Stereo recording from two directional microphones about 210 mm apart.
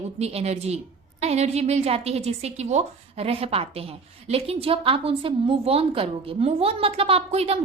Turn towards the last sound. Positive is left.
turn(degrees=-30)  # may be behind; listen again after turning